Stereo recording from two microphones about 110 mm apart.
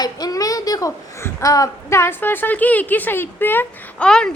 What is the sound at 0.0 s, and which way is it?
A child's voice, 35° left (ahead or behind).